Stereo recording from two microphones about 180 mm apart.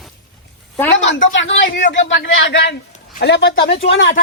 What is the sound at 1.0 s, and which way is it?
A man's voice, 90° left.